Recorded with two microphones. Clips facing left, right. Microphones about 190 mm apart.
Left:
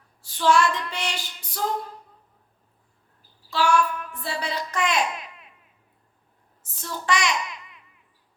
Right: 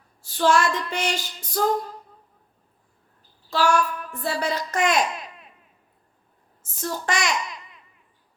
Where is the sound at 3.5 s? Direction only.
40° right (ahead or behind).